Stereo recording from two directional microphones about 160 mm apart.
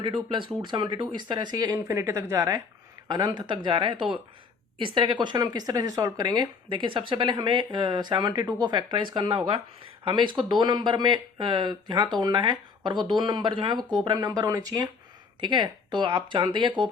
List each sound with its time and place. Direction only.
0.0 s speech: 30° right (ahead or behind)